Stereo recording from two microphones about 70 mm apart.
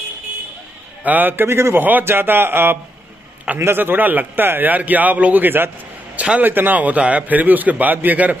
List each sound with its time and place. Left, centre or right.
1.0 s a man's voice: right